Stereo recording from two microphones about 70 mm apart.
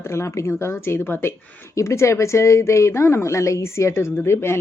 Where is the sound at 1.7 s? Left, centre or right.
Left.